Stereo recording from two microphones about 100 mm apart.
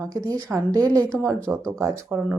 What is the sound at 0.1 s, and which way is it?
A woman's voice, 35° right (ahead or behind).